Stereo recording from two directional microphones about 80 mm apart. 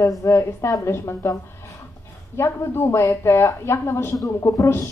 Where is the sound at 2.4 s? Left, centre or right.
Left.